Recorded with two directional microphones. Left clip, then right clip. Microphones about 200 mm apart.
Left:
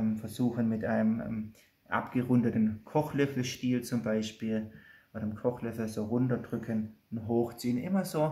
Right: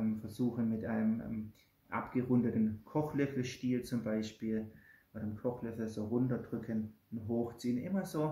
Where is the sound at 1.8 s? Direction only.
35° left (ahead or behind).